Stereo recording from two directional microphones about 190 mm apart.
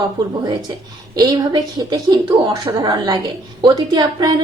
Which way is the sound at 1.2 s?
20° right (ahead or behind).